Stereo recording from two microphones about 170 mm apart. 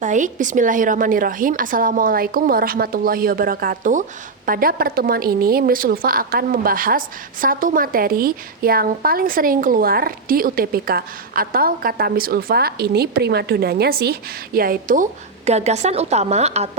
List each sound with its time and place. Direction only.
0.0 s a woman's voice: 50° right (ahead or behind)
15.4 s a woman's voice: 40° right (ahead or behind)